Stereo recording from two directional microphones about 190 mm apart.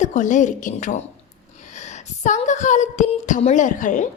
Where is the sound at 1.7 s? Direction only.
40° left (ahead or behind).